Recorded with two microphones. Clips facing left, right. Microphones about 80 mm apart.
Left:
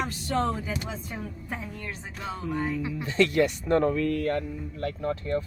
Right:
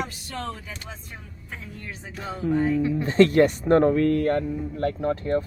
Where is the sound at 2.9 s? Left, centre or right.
Right.